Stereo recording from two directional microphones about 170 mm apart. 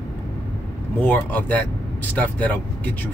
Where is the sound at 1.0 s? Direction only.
10° left (ahead or behind).